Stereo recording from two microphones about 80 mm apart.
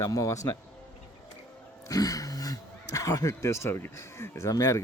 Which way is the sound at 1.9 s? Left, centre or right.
Left.